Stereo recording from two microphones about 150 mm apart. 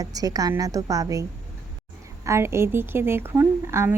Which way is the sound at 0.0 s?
25° right (ahead or behind).